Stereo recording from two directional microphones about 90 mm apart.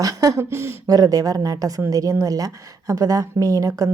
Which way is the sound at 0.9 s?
45° right (ahead or behind).